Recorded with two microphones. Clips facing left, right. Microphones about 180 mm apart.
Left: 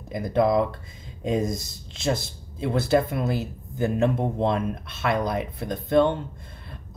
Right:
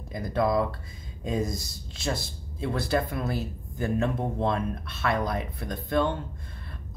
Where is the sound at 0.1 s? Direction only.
25° left (ahead or behind).